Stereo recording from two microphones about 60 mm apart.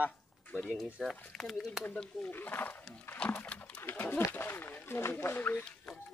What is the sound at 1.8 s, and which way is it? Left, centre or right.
Speech, left.